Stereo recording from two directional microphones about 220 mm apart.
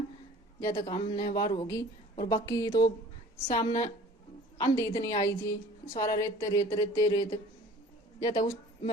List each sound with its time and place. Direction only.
0.8 s a woman's voice: 20° left (ahead or behind)